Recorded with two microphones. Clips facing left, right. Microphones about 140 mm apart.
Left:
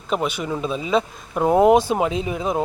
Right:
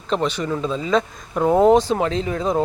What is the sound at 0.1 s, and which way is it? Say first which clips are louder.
Speech: right 2 dB; 10° left (ahead or behind).